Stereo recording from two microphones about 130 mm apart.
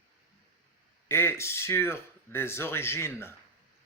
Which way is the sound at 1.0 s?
20° left (ahead or behind).